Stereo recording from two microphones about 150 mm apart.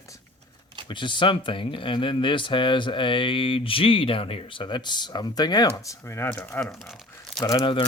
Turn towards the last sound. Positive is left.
turn(degrees=25)  # may be behind; listen again after turning